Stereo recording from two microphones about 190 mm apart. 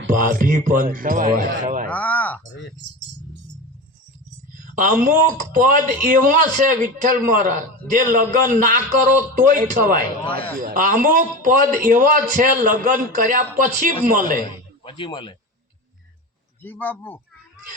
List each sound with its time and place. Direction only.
0.1 s a man's voice: 45° right (ahead or behind)
1.9 s speech: 10° left (ahead or behind)
4.5 s a sound: 45° right (ahead or behind)
5.2 s a man's voice: 45° right (ahead or behind)
14.8 s speech: 25° left (ahead or behind)
16.6 s speech: 10° left (ahead or behind)